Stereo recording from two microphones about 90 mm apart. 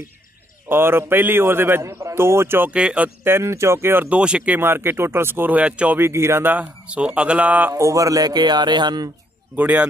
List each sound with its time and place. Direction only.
0.7 s a man's voice: 25° right (ahead or behind)
2.7 s speech: 15° right (ahead or behind)
3.3 s a man's voice: 30° right (ahead or behind); by 4.6 s 10° right (ahead or behind)
4.6 s a man's voice: 25° right (ahead or behind)
5.9 s a man's voice: 30° right (ahead or behind)
6.5 s speech: 15° right (ahead or behind)
7.7 s a man's voice: 35° right (ahead or behind); by 9.1 s 50° right (ahead or behind)
9.6 s speech: 15° right (ahead or behind)